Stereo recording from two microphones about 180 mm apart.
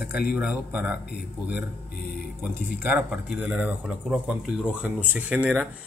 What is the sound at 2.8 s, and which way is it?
Speech, 10° right (ahead or behind).